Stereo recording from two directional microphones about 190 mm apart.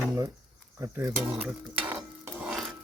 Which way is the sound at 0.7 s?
15° right (ahead or behind).